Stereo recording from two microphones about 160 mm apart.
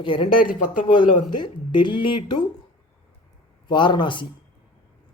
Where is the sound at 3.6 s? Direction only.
30° left (ahead or behind).